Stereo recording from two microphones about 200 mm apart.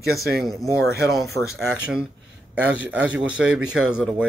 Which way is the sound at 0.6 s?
15° left (ahead or behind).